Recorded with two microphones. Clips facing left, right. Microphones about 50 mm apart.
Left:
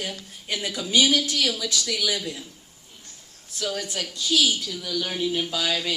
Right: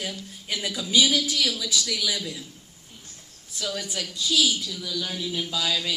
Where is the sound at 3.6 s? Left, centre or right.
Left.